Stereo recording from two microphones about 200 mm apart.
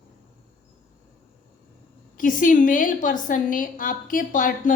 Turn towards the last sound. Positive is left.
turn(degrees=40)  # may be behind; listen again after turning